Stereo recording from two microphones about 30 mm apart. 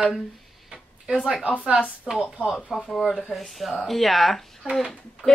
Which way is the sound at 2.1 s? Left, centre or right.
Right.